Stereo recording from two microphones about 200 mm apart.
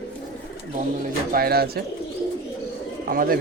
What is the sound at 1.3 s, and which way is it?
Speech, 50° right (ahead or behind).